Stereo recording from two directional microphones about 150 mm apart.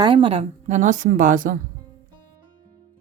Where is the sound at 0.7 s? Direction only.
55° right (ahead or behind).